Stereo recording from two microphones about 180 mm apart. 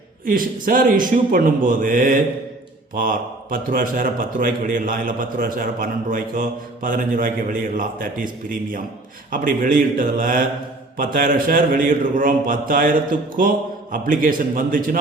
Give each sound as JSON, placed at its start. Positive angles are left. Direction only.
{"t": 0.3, "sound": "a man's voice", "side_deg": -50}